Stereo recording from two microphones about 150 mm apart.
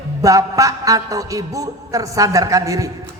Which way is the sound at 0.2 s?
20° right (ahead or behind).